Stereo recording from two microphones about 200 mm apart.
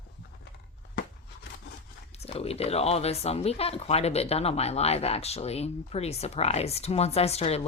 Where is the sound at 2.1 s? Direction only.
30° left (ahead or behind).